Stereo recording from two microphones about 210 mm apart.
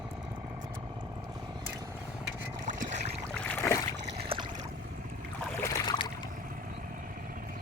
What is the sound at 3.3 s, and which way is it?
Boat, 10° left (ahead or behind).